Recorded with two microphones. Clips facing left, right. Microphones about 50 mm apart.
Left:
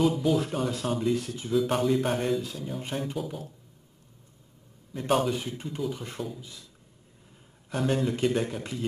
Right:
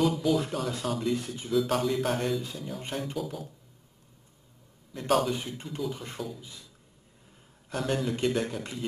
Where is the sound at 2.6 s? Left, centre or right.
Centre.